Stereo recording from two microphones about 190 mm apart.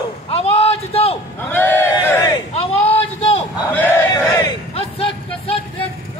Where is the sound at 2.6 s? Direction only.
30° left (ahead or behind).